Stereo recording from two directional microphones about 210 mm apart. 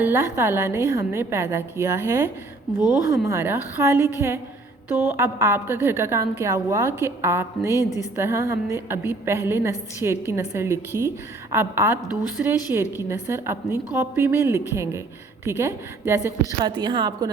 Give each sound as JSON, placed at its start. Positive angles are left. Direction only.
{"t": 0.0, "sound": "a woman's voice", "side_deg": -10}
{"t": 7.8, "sound": "a woman's voice", "side_deg": 15}
{"t": 8.1, "sound": "a woman's voice", "side_deg": -10}